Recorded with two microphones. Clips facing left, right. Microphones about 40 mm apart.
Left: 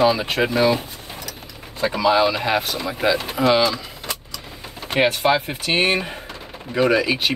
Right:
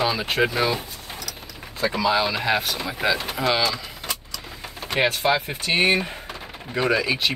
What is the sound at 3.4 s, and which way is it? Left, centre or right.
Vehicle, centre.